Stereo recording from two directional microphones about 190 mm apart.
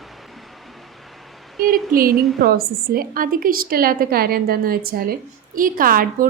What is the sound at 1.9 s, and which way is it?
Speech, 50° right (ahead or behind).